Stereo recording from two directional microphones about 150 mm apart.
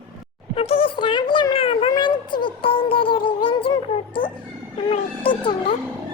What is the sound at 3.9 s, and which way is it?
Speech, 35° left (ahead or behind).